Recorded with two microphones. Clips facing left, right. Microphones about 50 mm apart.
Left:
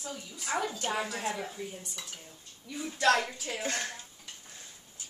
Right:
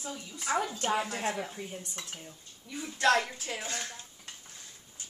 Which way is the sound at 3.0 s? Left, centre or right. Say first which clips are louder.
Even; centre.